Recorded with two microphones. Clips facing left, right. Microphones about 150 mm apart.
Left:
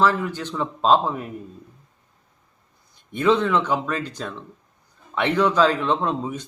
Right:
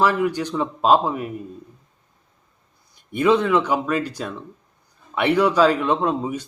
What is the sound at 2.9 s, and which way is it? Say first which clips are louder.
Speech: right 2 dB; 10° right (ahead or behind).